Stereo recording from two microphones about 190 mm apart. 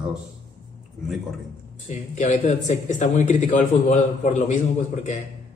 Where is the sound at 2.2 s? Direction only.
40° left (ahead or behind).